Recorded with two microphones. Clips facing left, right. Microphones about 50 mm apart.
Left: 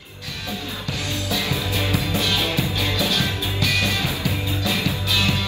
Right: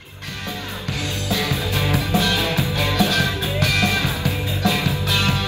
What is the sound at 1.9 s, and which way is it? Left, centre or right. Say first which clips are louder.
Music: right 4 dB; right.